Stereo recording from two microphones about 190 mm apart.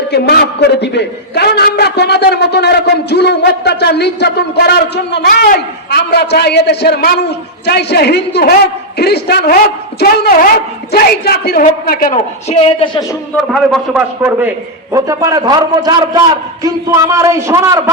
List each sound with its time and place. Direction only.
0.1 s a man's voice: 60° left (ahead or behind); by 13.1 s 25° left (ahead or behind)
13.3 s a man's voice: centre (ahead or behind); by 17.9 s 15° right (ahead or behind)